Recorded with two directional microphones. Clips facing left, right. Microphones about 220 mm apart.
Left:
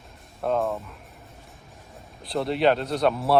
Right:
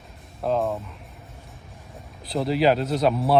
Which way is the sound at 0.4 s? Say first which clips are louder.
Right 1 dB; centre (ahead or behind).